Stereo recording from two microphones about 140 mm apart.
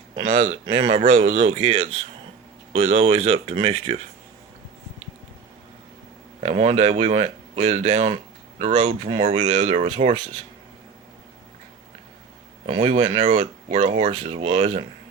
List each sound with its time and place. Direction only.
0.3 s speech: 55° right (ahead or behind)
6.4 s speech: 50° right (ahead or behind)
12.6 s speech: 40° right (ahead or behind)
12.9 s speech: 60° right (ahead or behind)